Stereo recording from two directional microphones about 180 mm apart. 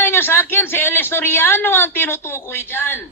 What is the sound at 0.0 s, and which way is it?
A man's voice, 10° left (ahead or behind).